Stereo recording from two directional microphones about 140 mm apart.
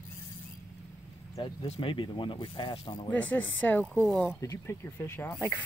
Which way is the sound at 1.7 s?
40° left (ahead or behind).